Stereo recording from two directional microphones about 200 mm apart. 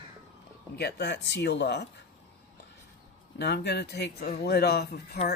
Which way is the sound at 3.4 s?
55° left (ahead or behind).